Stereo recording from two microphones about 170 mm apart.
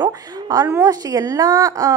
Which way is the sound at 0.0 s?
20° right (ahead or behind).